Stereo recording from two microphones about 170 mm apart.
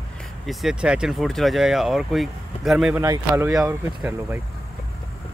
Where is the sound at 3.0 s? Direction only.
15° right (ahead or behind).